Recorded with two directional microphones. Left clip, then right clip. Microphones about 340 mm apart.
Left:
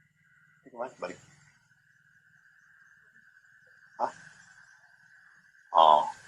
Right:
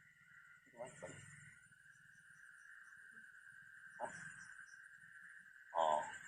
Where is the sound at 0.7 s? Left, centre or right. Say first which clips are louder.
Left 15 dB; left.